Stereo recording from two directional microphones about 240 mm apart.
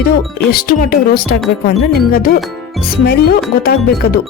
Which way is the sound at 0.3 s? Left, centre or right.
Left.